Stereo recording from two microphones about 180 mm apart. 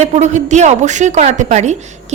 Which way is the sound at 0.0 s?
40° right (ahead or behind).